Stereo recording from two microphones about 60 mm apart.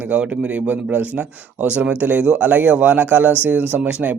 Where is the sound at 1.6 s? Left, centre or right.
Right.